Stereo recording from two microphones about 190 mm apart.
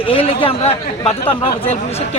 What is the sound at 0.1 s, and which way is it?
A man's voice, 30° left (ahead or behind).